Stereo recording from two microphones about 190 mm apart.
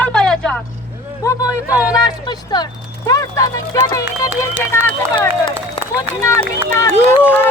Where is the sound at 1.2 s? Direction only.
15° left (ahead or behind).